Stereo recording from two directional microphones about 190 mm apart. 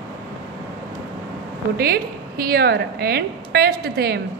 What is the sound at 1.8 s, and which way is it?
Speech, 55° right (ahead or behind).